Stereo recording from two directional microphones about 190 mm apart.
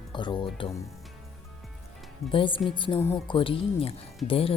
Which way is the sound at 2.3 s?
25° left (ahead or behind).